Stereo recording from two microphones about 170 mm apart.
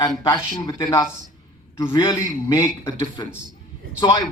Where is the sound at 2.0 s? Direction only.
20° left (ahead or behind).